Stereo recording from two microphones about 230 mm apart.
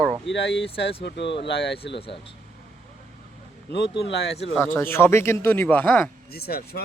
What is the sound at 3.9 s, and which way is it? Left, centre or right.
Speech, left.